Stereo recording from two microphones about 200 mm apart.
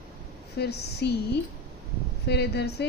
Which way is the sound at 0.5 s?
55° left (ahead or behind).